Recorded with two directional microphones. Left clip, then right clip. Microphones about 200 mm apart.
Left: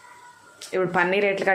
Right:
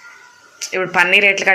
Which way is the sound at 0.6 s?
10° left (ahead or behind).